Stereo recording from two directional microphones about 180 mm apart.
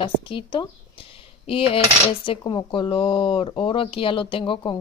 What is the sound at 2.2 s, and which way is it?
Speech, 30° left (ahead or behind).